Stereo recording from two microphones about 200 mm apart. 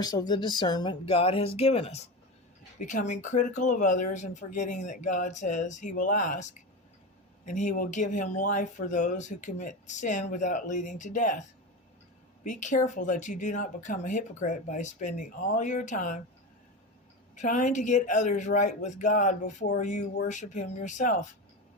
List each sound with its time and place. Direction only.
0.0 s speech: 20° left (ahead or behind); by 16.2 s 40° left (ahead or behind)
17.3 s speech: 40° left (ahead or behind)